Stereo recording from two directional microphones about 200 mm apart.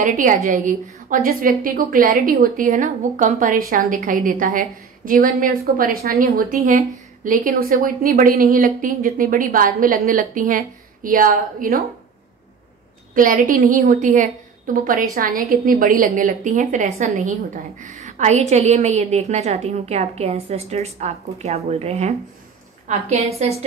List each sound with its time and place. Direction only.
0.0 s a woman's voice: 40° right (ahead or behind)
13.1 s a woman's voice: 45° right (ahead or behind)